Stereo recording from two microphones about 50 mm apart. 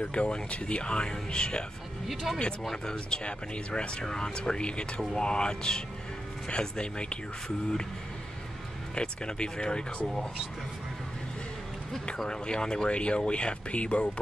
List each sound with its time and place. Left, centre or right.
0.1 s speech: left
2.3 s speech: centre
2.7 s speech: centre
8.9 s speech: centre
12.2 s speech: centre